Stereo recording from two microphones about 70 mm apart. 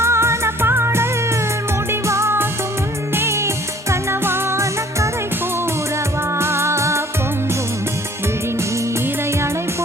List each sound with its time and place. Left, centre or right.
0.0 s music: right
6.4 s music: right